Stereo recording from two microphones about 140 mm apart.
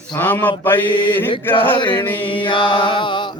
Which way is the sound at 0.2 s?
10° left (ahead or behind).